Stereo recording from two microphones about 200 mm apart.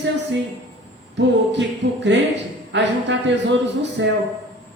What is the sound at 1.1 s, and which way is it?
Speech, 60° right (ahead or behind).